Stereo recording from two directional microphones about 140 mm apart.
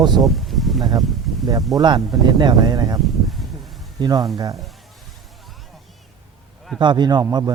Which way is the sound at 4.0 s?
30° right (ahead or behind).